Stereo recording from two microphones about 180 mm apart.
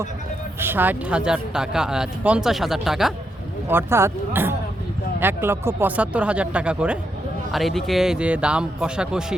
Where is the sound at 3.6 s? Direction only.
15° right (ahead or behind).